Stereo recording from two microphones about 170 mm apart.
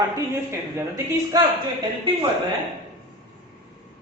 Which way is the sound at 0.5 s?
15° right (ahead or behind).